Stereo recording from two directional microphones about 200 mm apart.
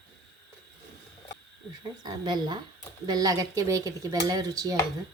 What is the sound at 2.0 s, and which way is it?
A woman's voice, 20° right (ahead or behind).